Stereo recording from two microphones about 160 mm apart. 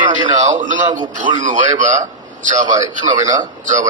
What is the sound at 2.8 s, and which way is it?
Speech, 25° right (ahead or behind).